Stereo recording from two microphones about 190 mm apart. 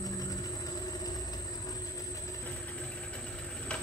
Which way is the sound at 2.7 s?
5° left (ahead or behind).